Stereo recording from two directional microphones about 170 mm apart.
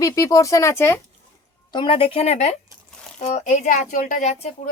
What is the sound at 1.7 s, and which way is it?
Speech, 30° left (ahead or behind).